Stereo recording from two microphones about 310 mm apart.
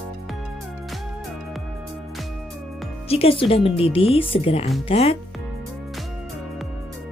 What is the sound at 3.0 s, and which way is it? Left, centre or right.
Speech, centre.